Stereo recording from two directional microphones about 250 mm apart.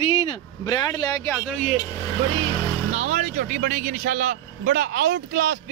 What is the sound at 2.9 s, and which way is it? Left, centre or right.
Speech, right.